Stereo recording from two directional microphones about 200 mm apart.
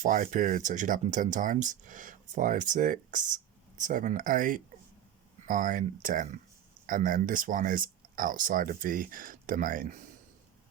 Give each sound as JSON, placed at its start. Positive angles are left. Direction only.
{"t": 0.0, "sound": "speech", "side_deg": -40}